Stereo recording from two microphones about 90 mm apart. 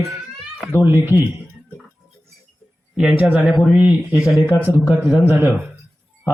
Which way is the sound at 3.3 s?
15° right (ahead or behind).